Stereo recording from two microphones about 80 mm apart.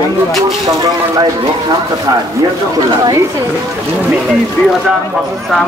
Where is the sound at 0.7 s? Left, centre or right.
Right.